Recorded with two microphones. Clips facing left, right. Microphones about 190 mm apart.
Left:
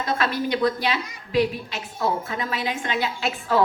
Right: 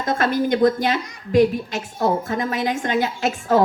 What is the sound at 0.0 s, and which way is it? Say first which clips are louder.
A woman's voice: right 4 dB; 45° right (ahead or behind).